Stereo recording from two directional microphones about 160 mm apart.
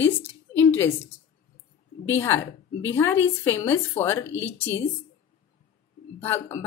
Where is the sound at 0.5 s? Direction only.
15° left (ahead or behind).